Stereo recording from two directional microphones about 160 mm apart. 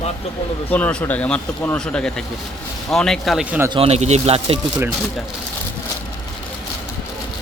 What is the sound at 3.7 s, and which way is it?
Speech, 40° right (ahead or behind).